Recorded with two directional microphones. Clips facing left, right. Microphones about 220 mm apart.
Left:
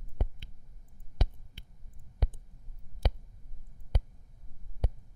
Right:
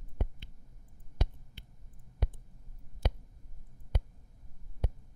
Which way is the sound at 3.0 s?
40° left (ahead or behind).